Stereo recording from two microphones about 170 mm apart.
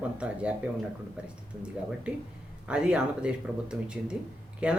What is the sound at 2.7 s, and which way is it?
Speech, 5° right (ahead or behind).